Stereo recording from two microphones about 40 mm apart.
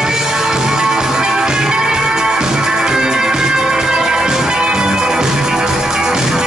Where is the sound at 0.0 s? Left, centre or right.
Centre.